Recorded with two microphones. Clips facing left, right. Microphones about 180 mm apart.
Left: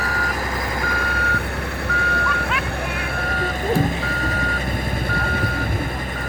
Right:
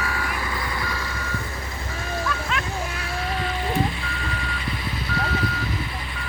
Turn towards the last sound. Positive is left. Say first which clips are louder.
# left 2 dB
turn(degrees=50)  # may be behind; listen again after turning